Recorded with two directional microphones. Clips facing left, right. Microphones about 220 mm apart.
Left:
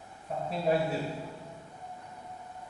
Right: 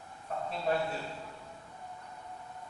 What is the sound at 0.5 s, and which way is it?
Speech, 10° left (ahead or behind).